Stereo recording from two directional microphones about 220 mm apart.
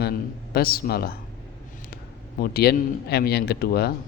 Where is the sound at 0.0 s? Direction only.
45° left (ahead or behind).